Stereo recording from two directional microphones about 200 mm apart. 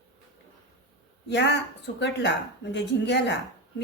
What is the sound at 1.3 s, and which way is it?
A woman's voice, 60° left (ahead or behind).